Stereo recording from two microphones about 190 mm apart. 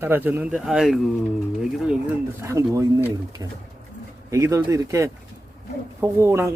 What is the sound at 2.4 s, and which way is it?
Speech, 15° right (ahead or behind).